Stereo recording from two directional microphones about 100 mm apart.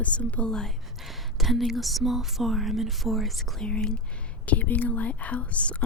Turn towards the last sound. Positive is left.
turn(degrees=10)  # may be behind; listen again after turning